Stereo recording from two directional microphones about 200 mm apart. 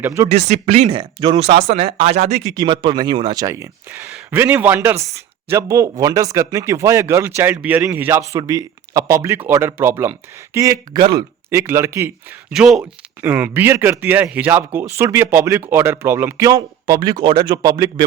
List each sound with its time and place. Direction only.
0.0 s speech: 15° right (ahead or behind)
0.3 s speech: 35° right (ahead or behind)
0.9 s speech: 25° right (ahead or behind)
2.6 s speech: 20° right (ahead or behind)